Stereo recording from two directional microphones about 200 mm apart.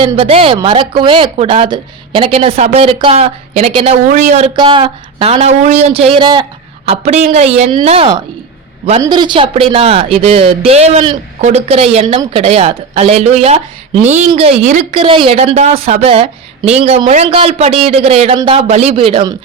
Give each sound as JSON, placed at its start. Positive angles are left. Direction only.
{"t": 0.0, "sound": "a woman's voice", "side_deg": -30}